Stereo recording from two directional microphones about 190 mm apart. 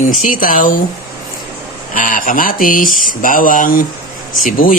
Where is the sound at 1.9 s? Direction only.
45° left (ahead or behind).